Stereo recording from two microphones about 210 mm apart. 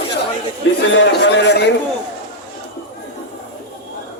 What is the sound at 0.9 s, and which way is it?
Speech, 55° left (ahead or behind).